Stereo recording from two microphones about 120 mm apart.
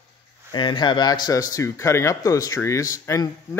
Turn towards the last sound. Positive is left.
turn(degrees=30)  # may be behind; listen again after turning